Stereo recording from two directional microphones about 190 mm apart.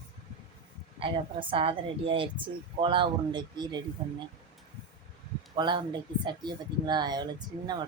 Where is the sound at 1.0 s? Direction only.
30° right (ahead or behind).